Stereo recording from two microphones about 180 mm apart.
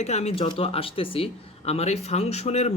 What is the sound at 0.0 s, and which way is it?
Speech, 40° left (ahead or behind).